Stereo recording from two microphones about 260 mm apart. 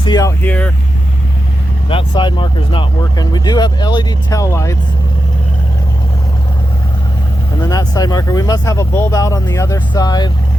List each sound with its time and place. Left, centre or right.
0.0 s speech: centre
1.9 s speech: centre
7.6 s speech: centre